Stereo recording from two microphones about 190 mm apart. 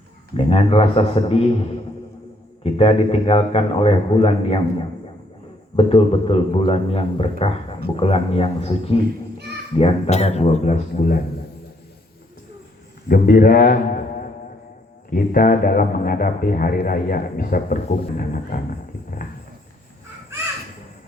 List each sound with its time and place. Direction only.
0.3 s a man's voice: 30° left (ahead or behind)
2.7 s a man's voice: 30° left (ahead or behind)
13.1 s a man's voice: 50° left (ahead or behind)